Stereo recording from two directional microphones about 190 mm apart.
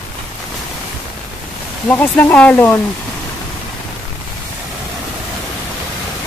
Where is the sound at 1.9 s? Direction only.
10° left (ahead or behind).